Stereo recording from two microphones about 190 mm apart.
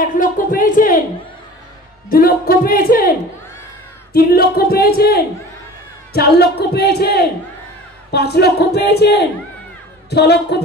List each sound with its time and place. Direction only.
0.0 s speech: 45° left (ahead or behind)
2.0 s speech: 50° left (ahead or behind)